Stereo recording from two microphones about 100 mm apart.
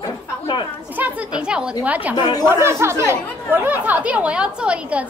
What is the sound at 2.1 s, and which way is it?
Speech, 50° left (ahead or behind).